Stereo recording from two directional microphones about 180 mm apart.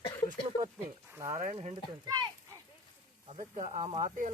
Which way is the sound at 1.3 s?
40° right (ahead or behind).